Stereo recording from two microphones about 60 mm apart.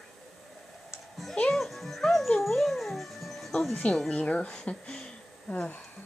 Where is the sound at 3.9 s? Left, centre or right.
Centre.